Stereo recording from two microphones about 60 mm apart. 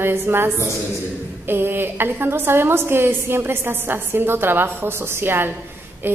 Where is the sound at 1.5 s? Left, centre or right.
Right.